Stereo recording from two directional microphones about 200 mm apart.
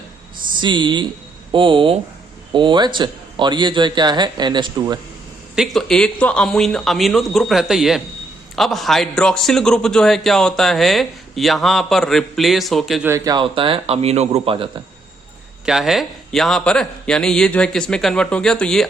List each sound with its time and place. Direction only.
0.6 s a man's voice: 25° right (ahead or behind)
5.5 s a man's voice: centre (ahead or behind)
13.1 s a man's voice: 15° right (ahead or behind)
15.6 s a man's voice: centre (ahead or behind)